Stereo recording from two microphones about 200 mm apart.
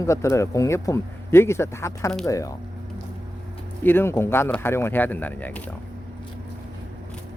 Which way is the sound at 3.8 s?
10° left (ahead or behind).